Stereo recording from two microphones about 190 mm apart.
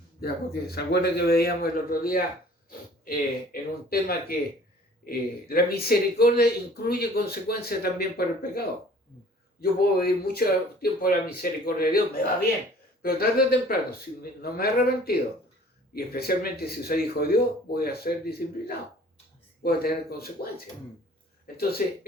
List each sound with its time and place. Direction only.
0.2 s speech: 55° left (ahead or behind)
21.8 s speech: 50° left (ahead or behind)